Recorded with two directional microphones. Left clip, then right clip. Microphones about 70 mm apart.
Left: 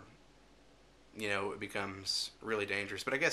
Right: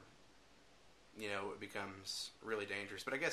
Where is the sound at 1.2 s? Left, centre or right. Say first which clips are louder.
Left 7 dB; left.